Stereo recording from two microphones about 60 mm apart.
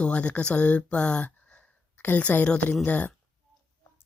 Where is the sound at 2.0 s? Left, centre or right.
Left.